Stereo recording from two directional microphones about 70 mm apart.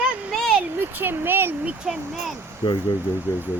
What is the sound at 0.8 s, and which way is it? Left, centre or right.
Speech, right.